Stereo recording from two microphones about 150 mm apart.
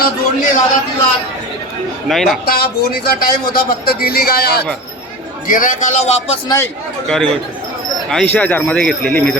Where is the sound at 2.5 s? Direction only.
90° left.